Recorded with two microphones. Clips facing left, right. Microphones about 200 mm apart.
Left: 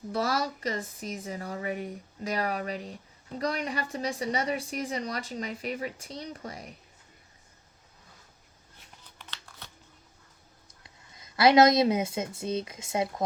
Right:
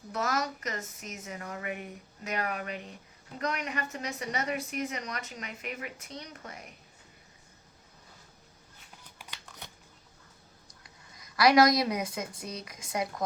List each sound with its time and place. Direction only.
0.1 s speech: 30° left (ahead or behind)
9.1 s a sound: 10° right (ahead or behind)
10.8 s a woman's voice: 25° left (ahead or behind)